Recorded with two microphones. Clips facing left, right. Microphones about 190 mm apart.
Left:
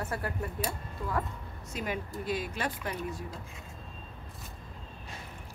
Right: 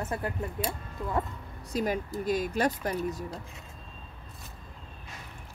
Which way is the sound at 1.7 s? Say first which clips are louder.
Right 6 dB; 40° right (ahead or behind).